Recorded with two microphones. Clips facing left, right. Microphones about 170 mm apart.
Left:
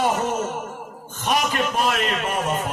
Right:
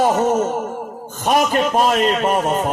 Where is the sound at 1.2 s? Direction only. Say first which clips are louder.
Right 6 dB; 45° right (ahead or behind).